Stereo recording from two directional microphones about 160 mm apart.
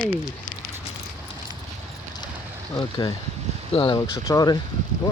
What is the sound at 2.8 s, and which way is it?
Speech, 25° left (ahead or behind).